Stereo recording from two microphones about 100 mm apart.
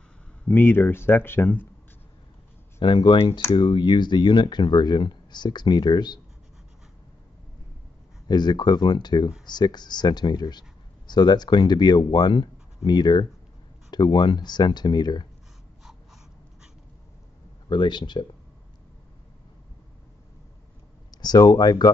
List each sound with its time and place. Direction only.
0.5 s speech: 20° left (ahead or behind)
2.8 s speech: 55° left (ahead or behind)
8.3 s speech: 45° left (ahead or behind)
17.6 s speech: 50° left (ahead or behind)
21.2 s speech: 45° left (ahead or behind)